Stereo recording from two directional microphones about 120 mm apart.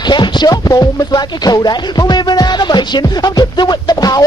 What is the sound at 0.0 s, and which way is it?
Speech, 40° left (ahead or behind).